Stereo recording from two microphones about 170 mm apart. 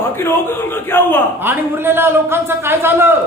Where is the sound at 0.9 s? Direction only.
10° left (ahead or behind).